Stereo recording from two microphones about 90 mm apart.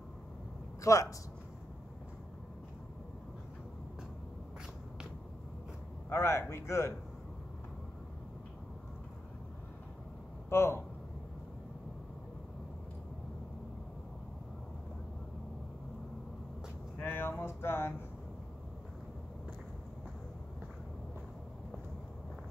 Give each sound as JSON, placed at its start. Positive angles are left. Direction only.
{"t": 0.9, "sound": "a man's voice", "side_deg": 35}
{"t": 6.0, "sound": "speech", "side_deg": 30}
{"t": 10.5, "sound": "speech", "side_deg": 30}
{"t": 17.0, "sound": "a sound", "side_deg": 20}